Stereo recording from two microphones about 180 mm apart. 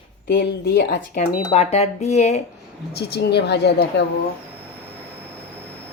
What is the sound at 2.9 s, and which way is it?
Speech, 65° left (ahead or behind).